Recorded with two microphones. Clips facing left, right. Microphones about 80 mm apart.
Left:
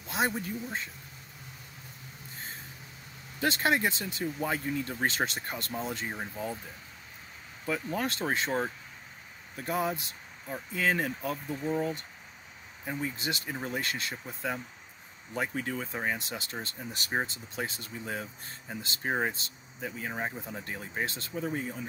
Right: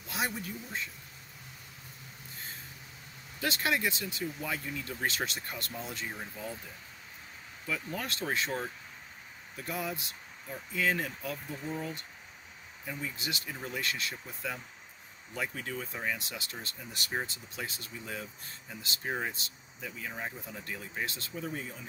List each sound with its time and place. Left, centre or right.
0.1 s speech: left
3.3 s speech: left
7.6 s speech: left
9.7 s speech: left